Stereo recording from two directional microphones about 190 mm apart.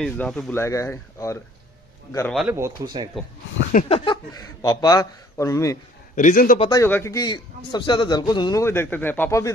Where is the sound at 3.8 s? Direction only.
45° left (ahead or behind).